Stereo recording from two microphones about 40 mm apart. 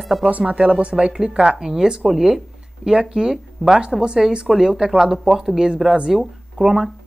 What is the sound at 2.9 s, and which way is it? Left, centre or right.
Speech, centre.